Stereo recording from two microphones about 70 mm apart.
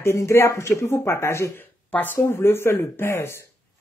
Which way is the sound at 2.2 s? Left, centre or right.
Left.